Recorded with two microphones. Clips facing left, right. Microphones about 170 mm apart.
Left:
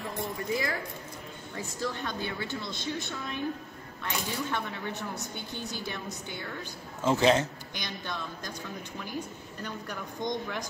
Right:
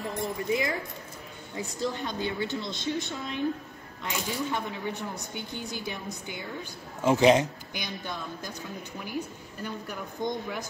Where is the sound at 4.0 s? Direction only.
15° right (ahead or behind).